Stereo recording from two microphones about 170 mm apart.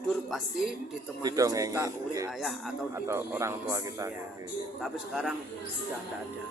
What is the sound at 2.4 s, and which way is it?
Speech, centre (ahead or behind).